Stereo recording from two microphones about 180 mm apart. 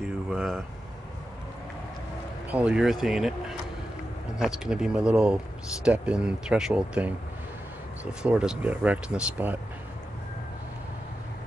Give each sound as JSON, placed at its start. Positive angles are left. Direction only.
{"t": 0.3, "sound": "speech", "side_deg": 0}
{"t": 2.5, "sound": "speech", "side_deg": -5}